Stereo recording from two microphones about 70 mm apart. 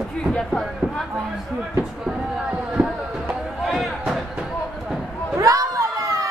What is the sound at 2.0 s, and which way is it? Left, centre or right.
Speech, centre.